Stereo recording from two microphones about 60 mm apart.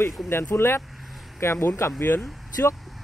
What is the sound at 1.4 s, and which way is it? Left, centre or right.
Speech, left.